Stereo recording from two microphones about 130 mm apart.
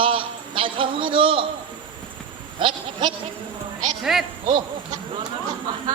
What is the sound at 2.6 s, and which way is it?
Sheep, 40° right (ahead or behind).